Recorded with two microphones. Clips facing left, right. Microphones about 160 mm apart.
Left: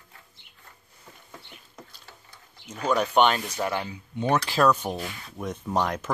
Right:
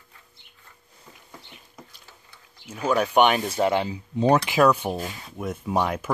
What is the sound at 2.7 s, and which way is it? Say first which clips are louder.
Speech: right 2 dB; 10° right (ahead or behind).